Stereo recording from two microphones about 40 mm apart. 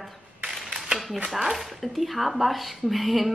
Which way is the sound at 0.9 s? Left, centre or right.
Centre.